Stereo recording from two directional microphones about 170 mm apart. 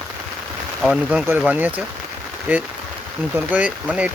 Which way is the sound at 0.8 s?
Centre (ahead or behind).